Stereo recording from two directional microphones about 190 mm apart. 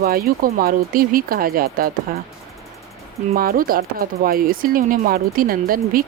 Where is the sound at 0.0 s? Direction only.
50° right (ahead or behind).